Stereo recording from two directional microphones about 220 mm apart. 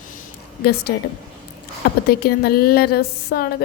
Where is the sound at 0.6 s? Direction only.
45° left (ahead or behind).